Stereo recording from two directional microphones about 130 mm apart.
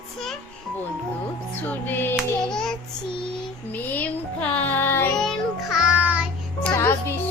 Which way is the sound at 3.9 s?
10° left (ahead or behind).